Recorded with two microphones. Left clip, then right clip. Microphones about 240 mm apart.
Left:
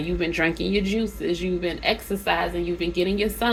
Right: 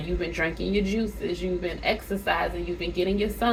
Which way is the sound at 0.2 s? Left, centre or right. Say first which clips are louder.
Left 5 dB; left.